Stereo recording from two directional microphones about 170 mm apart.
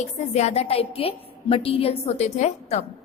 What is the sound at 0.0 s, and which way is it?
A woman's voice, 40° left (ahead or behind).